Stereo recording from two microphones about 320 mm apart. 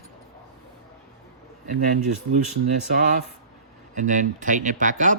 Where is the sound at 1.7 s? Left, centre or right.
Right.